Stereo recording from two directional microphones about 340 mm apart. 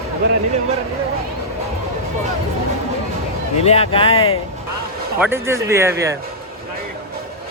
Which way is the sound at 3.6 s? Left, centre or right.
Centre.